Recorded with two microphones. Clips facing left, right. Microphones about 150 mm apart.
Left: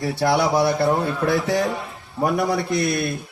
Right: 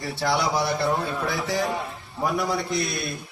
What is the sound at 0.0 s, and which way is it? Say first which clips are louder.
A man's voice: left 5 dB; 50° left (ahead or behind).